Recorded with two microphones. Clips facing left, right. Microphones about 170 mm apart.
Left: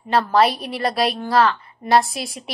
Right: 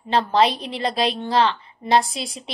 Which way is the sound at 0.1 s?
20° right (ahead or behind).